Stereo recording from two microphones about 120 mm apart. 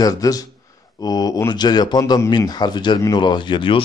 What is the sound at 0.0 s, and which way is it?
Speech, 30° left (ahead or behind).